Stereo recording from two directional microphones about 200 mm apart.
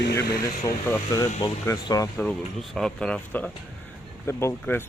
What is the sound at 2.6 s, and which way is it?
Speech, centre (ahead or behind).